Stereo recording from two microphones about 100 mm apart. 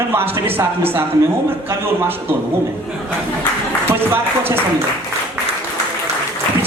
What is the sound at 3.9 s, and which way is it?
Speech, 25° right (ahead or behind).